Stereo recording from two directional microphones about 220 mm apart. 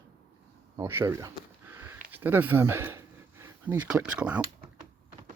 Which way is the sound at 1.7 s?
10° right (ahead or behind).